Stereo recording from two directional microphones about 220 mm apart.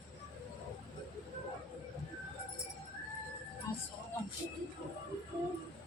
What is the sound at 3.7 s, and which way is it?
Music, 15° left (ahead or behind).